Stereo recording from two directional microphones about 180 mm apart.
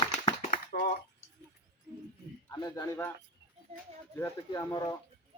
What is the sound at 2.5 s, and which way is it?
Speech, 20° left (ahead or behind).